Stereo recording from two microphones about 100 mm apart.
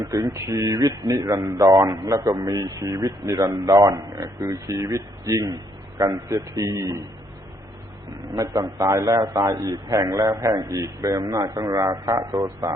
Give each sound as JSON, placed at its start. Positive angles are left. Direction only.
{"t": 0.0, "sound": "speech", "side_deg": -35}
{"t": 8.4, "sound": "speech", "side_deg": -35}